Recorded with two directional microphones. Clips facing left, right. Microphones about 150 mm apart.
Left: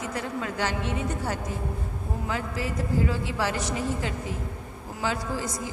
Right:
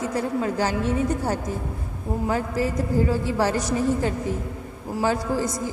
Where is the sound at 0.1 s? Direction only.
35° right (ahead or behind).